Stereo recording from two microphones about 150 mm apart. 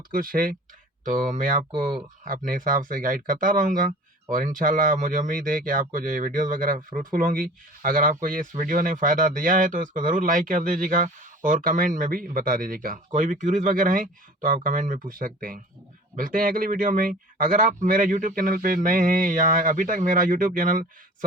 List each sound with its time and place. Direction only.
0.1 s speech: 70° right (ahead or behind)
1.7 s speech: 30° right (ahead or behind)
2.2 s speech: 65° right (ahead or behind)